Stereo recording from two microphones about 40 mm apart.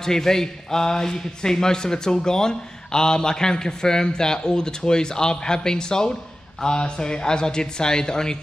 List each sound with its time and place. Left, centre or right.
0.0 s speech: centre